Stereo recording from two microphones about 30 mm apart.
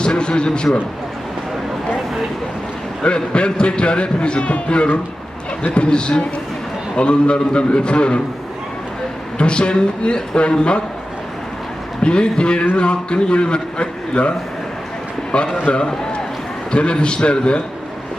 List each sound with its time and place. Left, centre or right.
0.0 s a man's voice: left
3.3 s a man's voice: left
9.4 s a man's voice: left
12.0 s a man's voice: left
16.7 s a man's voice: left